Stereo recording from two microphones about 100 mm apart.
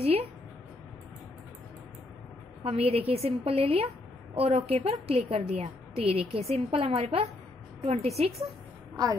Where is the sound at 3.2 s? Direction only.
80° right.